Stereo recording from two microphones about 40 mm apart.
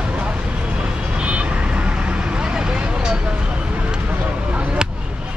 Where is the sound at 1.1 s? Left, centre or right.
Right.